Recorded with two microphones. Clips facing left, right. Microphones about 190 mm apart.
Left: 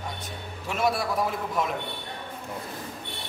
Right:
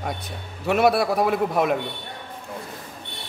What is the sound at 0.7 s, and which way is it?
A man's voice, 65° right (ahead or behind).